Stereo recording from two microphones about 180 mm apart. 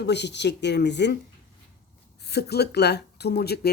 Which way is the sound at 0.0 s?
70° left (ahead or behind).